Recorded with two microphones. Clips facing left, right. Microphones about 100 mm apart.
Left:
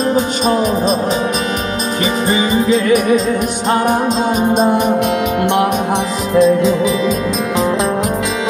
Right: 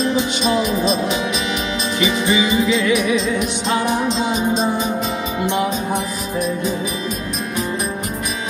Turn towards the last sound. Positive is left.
turn(degrees=90)